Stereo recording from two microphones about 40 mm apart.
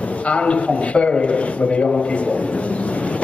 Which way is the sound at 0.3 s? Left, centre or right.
Left.